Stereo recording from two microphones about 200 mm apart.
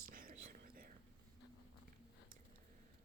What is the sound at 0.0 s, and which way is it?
Whispering, 45° right (ahead or behind).